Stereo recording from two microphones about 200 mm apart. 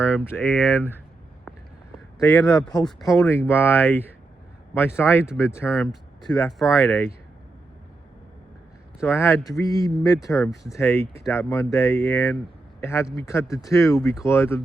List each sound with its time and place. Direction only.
0.0 s speech: 10° left (ahead or behind)
2.2 s speech: 15° left (ahead or behind)
9.0 s a man's voice: 10° left (ahead or behind)